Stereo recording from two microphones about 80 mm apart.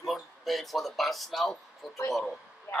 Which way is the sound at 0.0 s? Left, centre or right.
Centre.